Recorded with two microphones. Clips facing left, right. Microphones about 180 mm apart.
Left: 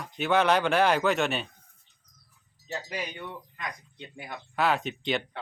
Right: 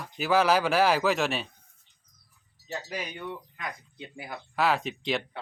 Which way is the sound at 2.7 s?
Centre (ahead or behind).